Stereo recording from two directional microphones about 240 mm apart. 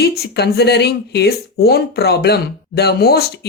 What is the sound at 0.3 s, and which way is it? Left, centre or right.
Speech, left.